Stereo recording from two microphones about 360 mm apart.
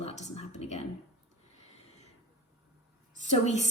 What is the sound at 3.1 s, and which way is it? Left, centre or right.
Speech, centre.